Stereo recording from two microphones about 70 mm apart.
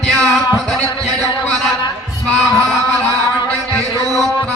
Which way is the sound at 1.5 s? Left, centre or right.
Centre.